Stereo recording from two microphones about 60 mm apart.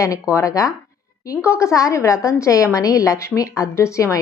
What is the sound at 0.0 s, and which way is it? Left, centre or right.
A woman's voice, left.